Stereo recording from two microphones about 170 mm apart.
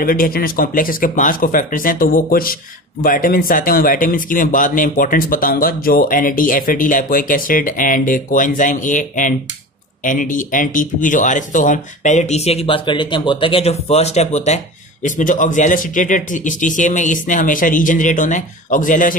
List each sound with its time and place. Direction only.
0.0 s speech: 55° left (ahead or behind)